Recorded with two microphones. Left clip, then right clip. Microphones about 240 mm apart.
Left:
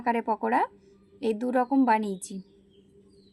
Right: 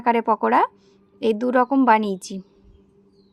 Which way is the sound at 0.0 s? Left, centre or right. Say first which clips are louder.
Right 8 dB; right.